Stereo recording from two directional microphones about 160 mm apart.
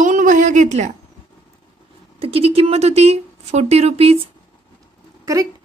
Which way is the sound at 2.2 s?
35° right (ahead or behind).